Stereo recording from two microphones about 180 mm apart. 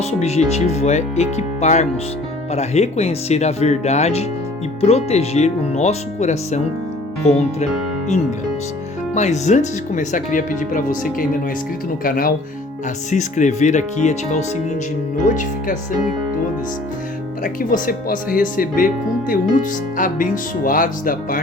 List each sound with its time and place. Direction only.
0.0 s speech: 35° left (ahead or behind)
9.1 s speech: 40° left (ahead or behind)
17.4 s speech: 50° left (ahead or behind)
20.0 s speech: 50° left (ahead or behind)